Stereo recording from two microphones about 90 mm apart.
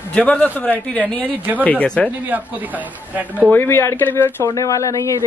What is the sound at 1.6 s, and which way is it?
Speech, 15° left (ahead or behind).